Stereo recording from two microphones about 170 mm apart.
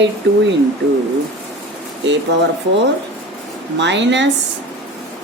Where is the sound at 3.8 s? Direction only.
90° right.